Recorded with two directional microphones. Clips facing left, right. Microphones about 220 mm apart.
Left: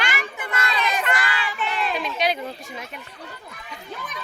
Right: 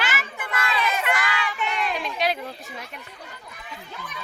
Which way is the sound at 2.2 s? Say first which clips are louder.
Left 1 dB; centre (ahead or behind).